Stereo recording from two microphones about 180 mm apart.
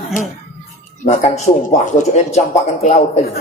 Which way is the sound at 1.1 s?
40° left (ahead or behind).